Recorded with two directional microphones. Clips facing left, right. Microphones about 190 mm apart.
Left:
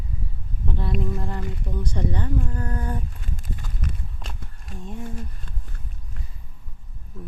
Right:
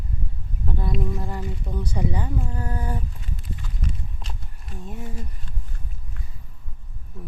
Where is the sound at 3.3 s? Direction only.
50° left (ahead or behind).